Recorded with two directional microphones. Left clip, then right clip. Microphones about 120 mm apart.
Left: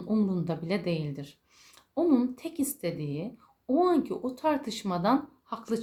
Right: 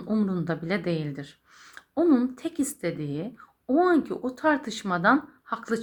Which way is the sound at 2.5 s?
Centre (ahead or behind).